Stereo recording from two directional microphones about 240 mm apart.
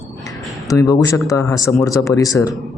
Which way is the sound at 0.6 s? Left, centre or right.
Centre.